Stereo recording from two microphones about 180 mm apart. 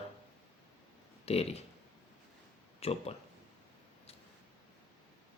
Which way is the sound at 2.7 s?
35° left (ahead or behind).